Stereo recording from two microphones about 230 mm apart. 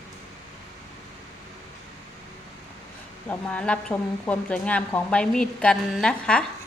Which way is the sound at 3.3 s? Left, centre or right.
Centre.